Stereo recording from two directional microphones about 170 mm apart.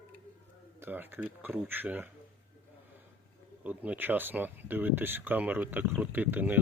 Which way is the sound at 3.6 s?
10° right (ahead or behind).